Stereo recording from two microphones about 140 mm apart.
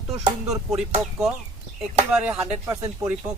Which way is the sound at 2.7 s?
20° right (ahead or behind).